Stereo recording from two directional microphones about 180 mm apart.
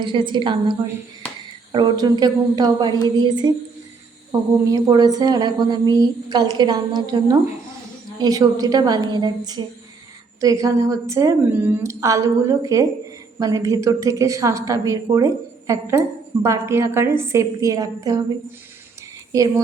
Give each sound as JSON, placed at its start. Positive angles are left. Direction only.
{"t": 0.0, "sound": "a woman's voice", "side_deg": -25}
{"t": 1.7, "sound": "a woman's voice", "side_deg": -25}
{"t": 19.3, "sound": "a woman's voice", "side_deg": -15}